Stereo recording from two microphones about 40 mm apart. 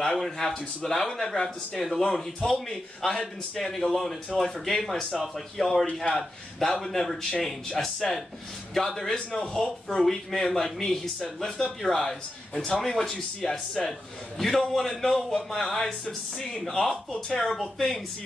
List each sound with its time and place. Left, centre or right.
0.0 s a man's voice: centre
6.8 s a man's voice: centre